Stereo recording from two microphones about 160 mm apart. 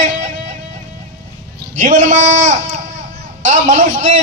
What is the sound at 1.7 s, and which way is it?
A man's voice, 55° right (ahead or behind).